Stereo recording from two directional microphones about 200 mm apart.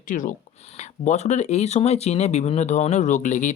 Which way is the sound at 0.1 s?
40° left (ahead or behind).